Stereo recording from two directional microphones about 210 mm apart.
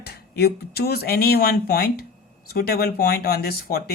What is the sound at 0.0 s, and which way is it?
Speech, 50° left (ahead or behind).